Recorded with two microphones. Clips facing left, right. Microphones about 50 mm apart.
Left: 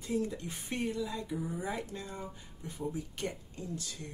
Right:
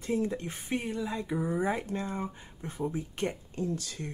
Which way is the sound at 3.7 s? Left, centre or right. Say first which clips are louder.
Right 5 dB; right.